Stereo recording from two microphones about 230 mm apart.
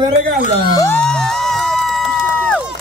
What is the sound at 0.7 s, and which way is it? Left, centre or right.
Crowd, centre.